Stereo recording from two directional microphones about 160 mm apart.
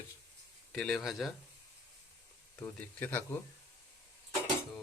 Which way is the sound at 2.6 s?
10° left (ahead or behind).